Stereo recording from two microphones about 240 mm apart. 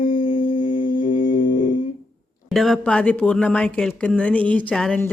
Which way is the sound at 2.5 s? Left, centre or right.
Centre.